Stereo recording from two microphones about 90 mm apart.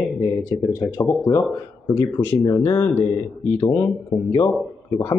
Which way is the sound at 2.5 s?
30° left (ahead or behind).